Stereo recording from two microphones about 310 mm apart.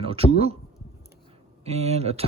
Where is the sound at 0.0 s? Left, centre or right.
Centre.